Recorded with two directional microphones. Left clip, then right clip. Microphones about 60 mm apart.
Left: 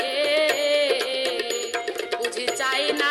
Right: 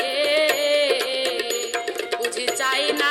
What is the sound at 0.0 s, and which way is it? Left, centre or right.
Music, right.